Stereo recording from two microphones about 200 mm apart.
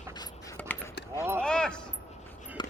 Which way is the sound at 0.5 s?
10° left (ahead or behind).